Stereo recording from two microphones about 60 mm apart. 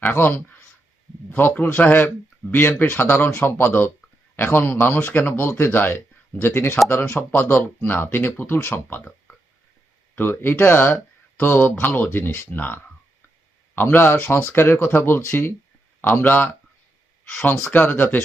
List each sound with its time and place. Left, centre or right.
0.1 s speech: left
8.9 s speech: left
13.9 s speech: left
16.2 s speech: left
17.7 s speech: left